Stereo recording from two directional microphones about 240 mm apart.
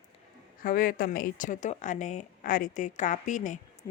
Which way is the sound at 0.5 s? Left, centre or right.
Left.